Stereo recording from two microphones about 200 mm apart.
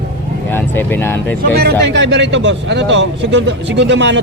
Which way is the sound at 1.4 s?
50° right (ahead or behind).